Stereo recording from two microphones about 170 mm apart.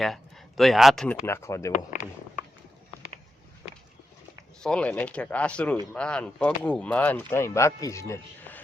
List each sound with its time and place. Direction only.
0.0 s speech: centre (ahead or behind)
1.2 s speech: 15° left (ahead or behind)
4.6 s speech: 5° left (ahead or behind)